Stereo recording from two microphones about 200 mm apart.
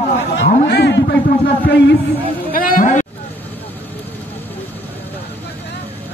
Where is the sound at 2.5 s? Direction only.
45° left (ahead or behind).